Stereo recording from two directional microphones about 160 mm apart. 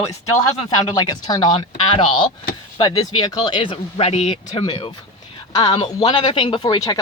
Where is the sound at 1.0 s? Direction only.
25° left (ahead or behind).